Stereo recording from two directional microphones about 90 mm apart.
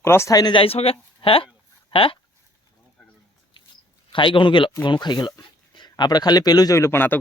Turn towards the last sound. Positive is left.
turn(degrees=25)  # may be behind; listen again after turning